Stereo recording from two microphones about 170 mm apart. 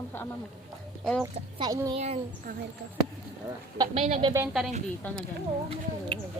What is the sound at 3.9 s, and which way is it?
Speech, 35° right (ahead or behind).